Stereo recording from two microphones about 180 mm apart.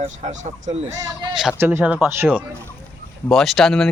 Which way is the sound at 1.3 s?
10° right (ahead or behind).